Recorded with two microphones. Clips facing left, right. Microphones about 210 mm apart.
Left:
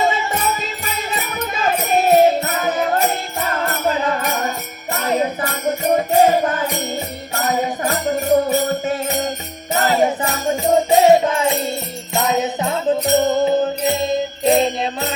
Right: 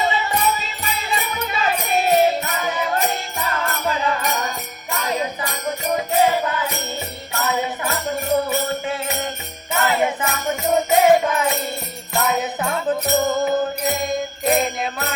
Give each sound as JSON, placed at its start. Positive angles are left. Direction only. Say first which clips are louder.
{"t": 0.1, "sound": "music", "louder": "left 1 dB", "side_deg": 45}
{"t": 1.9, "sound": "music", "louder": "left 4 dB", "side_deg": 45}
{"t": 4.9, "sound": "music", "louder": "left 5 dB", "side_deg": 40}